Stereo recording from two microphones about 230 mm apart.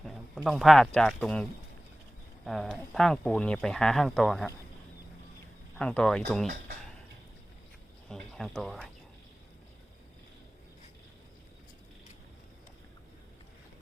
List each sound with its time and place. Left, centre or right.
0.0 s speech: centre
5.7 s speech: centre
8.1 s speech: centre